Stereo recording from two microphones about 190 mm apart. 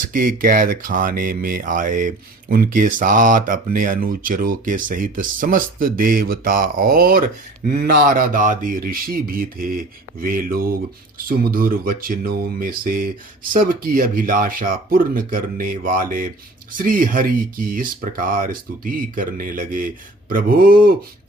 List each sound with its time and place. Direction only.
0.1 s speech: 45° right (ahead or behind)